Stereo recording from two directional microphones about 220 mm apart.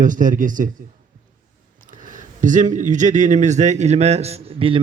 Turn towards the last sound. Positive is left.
turn(degrees=-25)  # may be behind; listen again after turning